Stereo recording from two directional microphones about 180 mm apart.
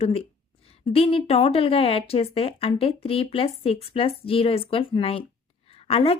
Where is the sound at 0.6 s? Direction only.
30° left (ahead or behind).